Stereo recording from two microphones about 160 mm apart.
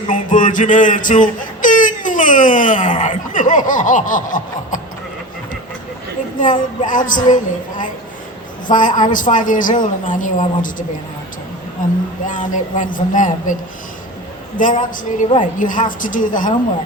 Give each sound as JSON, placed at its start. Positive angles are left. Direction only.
{"t": 0.1, "sound": "a sound", "side_deg": 55}
{"t": 3.0, "sound": "snicker", "side_deg": 55}
{"t": 6.4, "sound": "a woman's voice", "side_deg": 55}
{"t": 14.6, "sound": "a woman's voice", "side_deg": 55}